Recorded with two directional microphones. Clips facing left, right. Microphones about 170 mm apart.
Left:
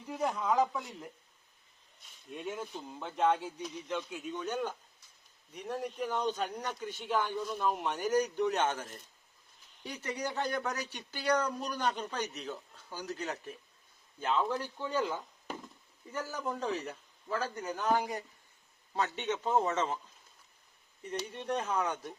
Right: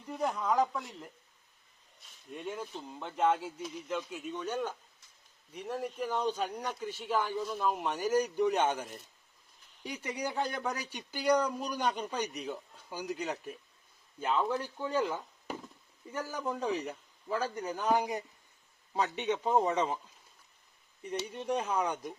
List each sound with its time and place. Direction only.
0.0 s speech: centre (ahead or behind)
15.1 s a sound: 10° right (ahead or behind)
16.1 s speech: 5° right (ahead or behind)
17.9 s speech: 20° right (ahead or behind)
21.1 s speech: 5° right (ahead or behind)